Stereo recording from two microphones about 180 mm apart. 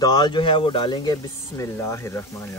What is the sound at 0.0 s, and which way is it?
Speech, 25° left (ahead or behind).